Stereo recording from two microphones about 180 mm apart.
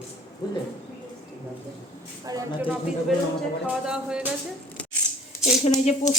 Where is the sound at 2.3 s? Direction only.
20° right (ahead or behind).